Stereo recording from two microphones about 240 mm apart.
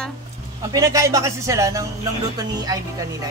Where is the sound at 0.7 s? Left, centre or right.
Centre.